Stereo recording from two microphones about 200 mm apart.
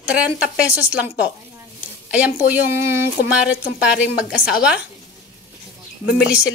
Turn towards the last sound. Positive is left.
turn(degrees=-5)  # may be behind; listen again after turning